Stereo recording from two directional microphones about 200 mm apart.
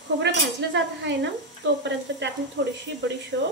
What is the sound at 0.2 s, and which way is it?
A woman's voice, 60° right (ahead or behind).